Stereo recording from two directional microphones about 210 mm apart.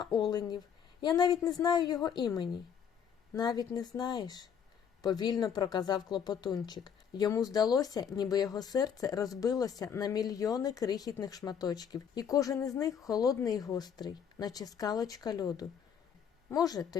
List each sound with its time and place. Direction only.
0.0 s a woman's voice: 20° left (ahead or behind)